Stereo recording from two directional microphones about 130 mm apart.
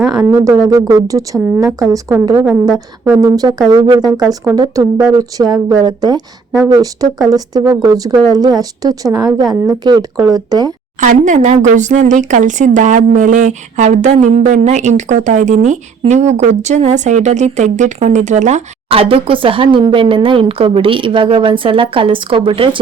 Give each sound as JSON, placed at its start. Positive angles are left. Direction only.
{"t": 0.2, "sound": "a woman's voice", "side_deg": -25}
{"t": 2.4, "sound": "a woman's voice", "side_deg": -5}
{"t": 3.2, "sound": "a woman's voice", "side_deg": -30}
{"t": 11.0, "sound": "speech", "side_deg": -80}
{"t": 18.9, "sound": "speech", "side_deg": -45}